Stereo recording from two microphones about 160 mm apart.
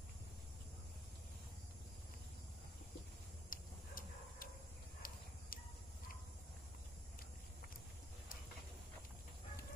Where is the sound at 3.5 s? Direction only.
60° left (ahead or behind).